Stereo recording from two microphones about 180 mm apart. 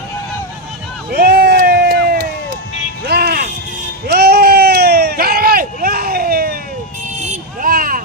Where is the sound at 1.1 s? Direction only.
60° right (ahead or behind).